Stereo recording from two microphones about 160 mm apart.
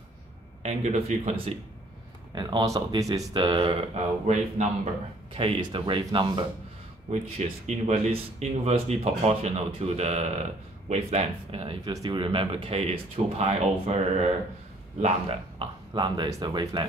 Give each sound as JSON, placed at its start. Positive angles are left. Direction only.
{"t": 0.6, "sound": "speech", "side_deg": -45}
{"t": 2.3, "sound": "speech", "side_deg": -25}
{"t": 7.1, "sound": "speech", "side_deg": -45}
{"t": 15.0, "sound": "speech", "side_deg": -40}